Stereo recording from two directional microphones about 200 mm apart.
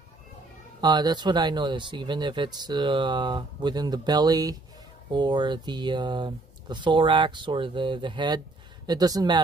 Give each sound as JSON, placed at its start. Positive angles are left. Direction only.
{"t": 0.7, "sound": "speech", "side_deg": -20}